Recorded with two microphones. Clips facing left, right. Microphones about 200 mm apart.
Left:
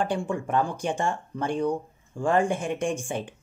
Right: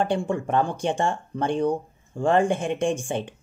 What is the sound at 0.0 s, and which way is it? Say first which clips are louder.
Speech: right 3 dB; 30° right (ahead or behind).